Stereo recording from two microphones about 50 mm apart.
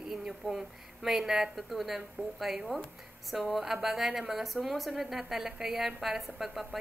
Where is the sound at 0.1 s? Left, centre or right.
Centre.